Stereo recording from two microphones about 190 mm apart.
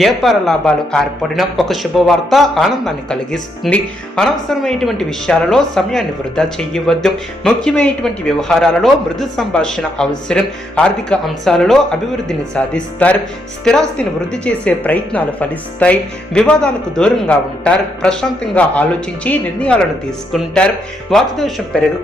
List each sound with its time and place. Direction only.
0.0 s speech: centre (ahead or behind)